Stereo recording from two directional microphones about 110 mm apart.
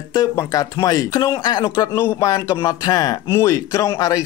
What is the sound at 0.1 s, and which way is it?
Speech, 35° left (ahead or behind).